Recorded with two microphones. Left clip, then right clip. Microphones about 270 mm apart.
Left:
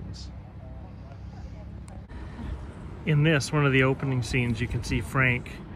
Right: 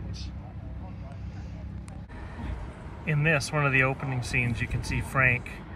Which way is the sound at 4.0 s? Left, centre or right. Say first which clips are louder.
Even; centre.